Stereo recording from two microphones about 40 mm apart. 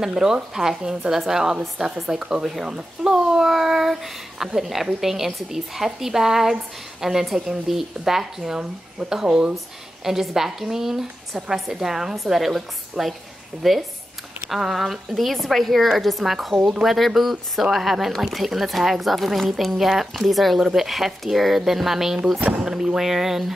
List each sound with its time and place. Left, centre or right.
0.0 s speech: centre
10.0 s speech: centre